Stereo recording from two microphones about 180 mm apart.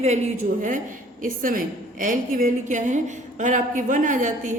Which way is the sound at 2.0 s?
50° right (ahead or behind).